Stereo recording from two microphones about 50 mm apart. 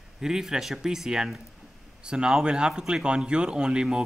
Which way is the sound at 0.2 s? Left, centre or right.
Centre.